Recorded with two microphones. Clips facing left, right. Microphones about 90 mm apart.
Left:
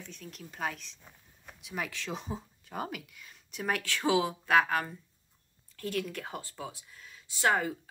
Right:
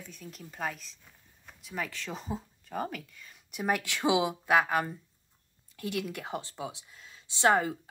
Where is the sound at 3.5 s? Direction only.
10° right (ahead or behind).